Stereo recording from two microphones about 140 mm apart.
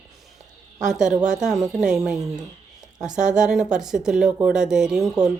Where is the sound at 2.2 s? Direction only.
25° right (ahead or behind).